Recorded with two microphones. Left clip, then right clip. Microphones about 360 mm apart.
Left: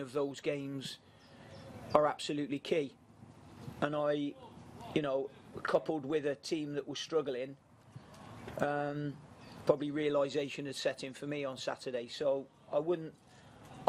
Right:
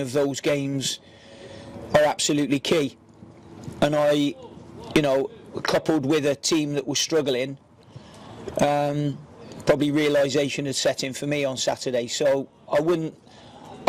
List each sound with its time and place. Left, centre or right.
0.0 s a man's voice: right
8.5 s a man's voice: right